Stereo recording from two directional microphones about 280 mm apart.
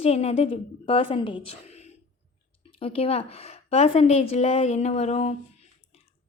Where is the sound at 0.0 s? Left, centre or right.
Left.